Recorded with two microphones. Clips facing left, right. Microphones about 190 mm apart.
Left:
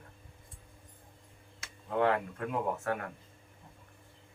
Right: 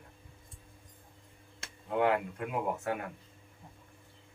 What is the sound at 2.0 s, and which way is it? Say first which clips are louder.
A woman's voice: even; 15° right (ahead or behind).